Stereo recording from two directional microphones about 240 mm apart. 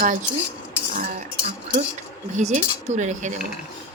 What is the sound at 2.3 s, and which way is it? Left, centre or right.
Speech, right.